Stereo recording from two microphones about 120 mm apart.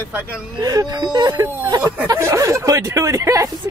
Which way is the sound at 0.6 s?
35° right (ahead or behind).